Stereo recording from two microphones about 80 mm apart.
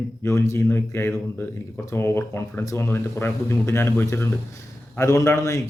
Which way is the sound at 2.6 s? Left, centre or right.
Left.